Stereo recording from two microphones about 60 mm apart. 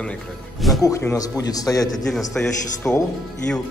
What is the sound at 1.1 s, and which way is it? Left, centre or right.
Speech, left.